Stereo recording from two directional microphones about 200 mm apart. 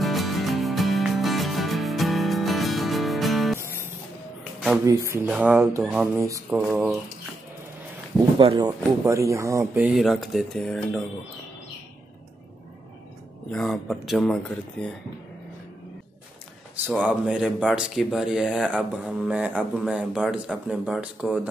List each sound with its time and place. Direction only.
0.0 s music: centre (ahead or behind)
4.8 s speech: 15° right (ahead or behind)
8.4 s speech: 25° right (ahead or behind)
9.8 s speech: centre (ahead or behind)
13.5 s speech: 5° left (ahead or behind)
16.8 s speech: 10° right (ahead or behind)